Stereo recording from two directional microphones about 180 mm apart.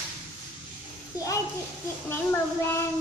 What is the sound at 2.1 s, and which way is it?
Child singing, 10° left (ahead or behind).